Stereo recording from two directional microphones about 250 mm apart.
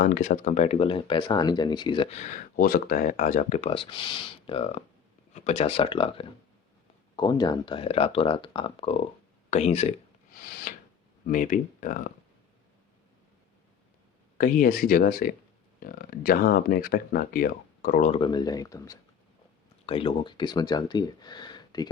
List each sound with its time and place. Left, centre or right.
0.0 s speech: left
11.3 s speech: left
14.3 s speech: left; by 21.8 s centre